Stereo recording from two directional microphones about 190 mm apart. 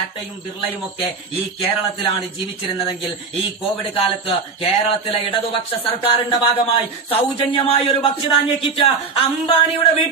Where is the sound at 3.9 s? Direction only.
30° left (ahead or behind).